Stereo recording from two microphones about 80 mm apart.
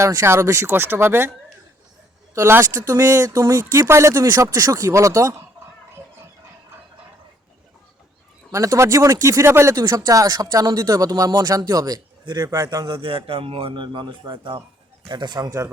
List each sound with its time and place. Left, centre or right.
0.2 s speech: right
2.3 s speech: right
8.5 s speech: right
9.7 s speech: right
12.5 s speech: right
12.9 s speech: right
15.0 s speech: right